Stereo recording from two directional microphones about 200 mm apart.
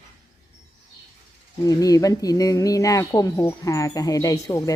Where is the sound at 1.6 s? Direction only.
15° left (ahead or behind).